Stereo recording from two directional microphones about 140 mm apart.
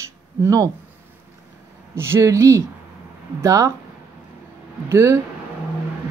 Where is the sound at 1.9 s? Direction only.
15° right (ahead or behind).